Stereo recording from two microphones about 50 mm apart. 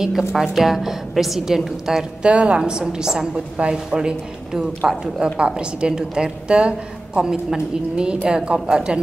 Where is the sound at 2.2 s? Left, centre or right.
Right.